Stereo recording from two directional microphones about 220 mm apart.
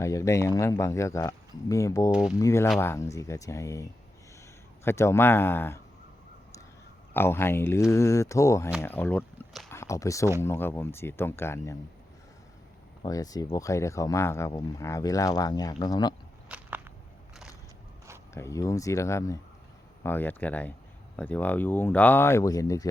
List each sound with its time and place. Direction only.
0.0 s speech: 15° left (ahead or behind)
7.1 s speech: 10° left (ahead or behind)
13.0 s speech: 15° left (ahead or behind)
16.5 s whip: 10° right (ahead or behind)
18.3 s speech: 15° left (ahead or behind)